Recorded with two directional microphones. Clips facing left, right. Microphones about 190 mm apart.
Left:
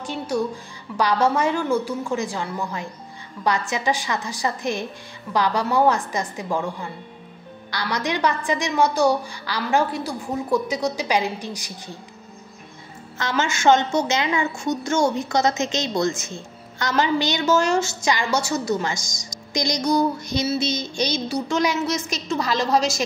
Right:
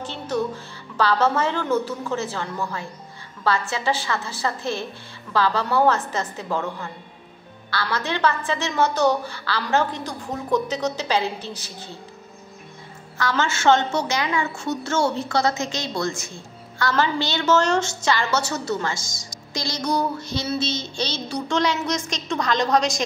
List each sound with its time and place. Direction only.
0.0 s music: 10° left (ahead or behind)
0.9 s a woman's voice: 15° left (ahead or behind)
13.2 s a woman's voice: 15° left (ahead or behind)